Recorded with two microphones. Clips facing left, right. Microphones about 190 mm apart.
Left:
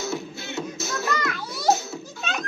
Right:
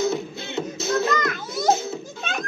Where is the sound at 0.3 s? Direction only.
55° right (ahead or behind).